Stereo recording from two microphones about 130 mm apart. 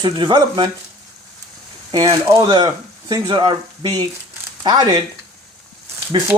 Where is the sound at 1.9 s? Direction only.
30° right (ahead or behind).